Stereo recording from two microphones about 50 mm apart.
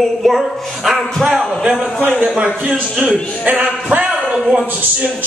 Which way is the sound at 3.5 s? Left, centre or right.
Right.